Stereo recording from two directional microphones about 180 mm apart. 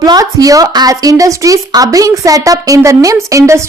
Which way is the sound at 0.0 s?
20° right (ahead or behind).